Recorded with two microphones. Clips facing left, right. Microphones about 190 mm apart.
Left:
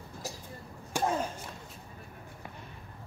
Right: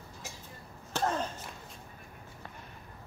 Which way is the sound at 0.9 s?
10° left (ahead or behind).